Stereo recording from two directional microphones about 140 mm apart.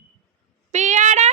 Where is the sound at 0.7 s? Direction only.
55° right (ahead or behind).